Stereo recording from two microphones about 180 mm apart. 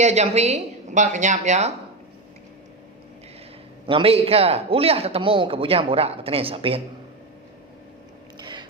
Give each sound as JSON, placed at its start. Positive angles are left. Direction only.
{"t": 0.0, "sound": "a man's voice", "side_deg": -40}
{"t": 3.8, "sound": "a man's voice", "side_deg": -30}
{"t": 8.4, "sound": "mechanisms", "side_deg": -25}